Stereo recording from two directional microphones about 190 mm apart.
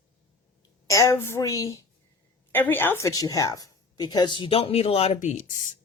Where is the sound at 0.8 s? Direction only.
15° left (ahead or behind); by 5.7 s 40° left (ahead or behind).